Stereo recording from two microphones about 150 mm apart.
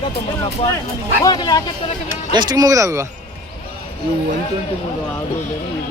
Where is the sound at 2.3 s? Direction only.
25° right (ahead or behind).